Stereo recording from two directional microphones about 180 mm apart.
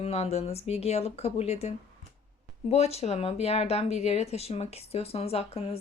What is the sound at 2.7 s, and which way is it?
Speech, 35° left (ahead or behind).